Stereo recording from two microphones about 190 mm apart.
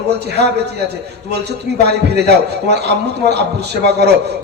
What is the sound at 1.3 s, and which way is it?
A man's voice, 60° right (ahead or behind).